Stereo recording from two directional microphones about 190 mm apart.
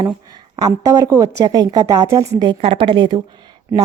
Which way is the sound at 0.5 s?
15° right (ahead or behind).